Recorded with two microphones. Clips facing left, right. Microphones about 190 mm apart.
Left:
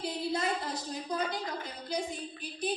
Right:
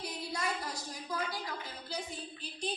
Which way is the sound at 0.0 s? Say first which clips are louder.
Left 6 dB; 25° left (ahead or behind).